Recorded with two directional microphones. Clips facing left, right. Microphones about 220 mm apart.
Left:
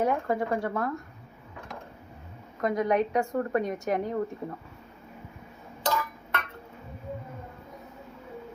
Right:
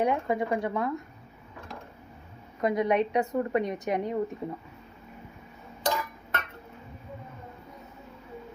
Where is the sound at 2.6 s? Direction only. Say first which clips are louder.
Even; 20° right (ahead or behind).